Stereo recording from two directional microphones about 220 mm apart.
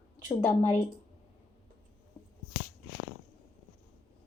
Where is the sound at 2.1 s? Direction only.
15° left (ahead or behind).